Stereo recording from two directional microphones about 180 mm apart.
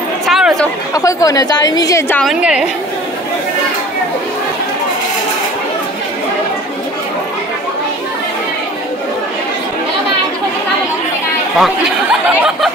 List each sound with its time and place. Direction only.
0.3 s chatter: centre (ahead or behind)
0.9 s a woman's voice: 20° left (ahead or behind)
2.2 s a woman's voice: 5° right (ahead or behind)
11.5 s speech: centre (ahead or behind)